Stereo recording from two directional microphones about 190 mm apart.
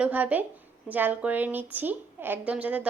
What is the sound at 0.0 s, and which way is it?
A woman's voice, 10° right (ahead or behind).